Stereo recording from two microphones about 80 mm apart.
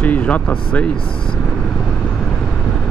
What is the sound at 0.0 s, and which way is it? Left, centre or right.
Speech, centre.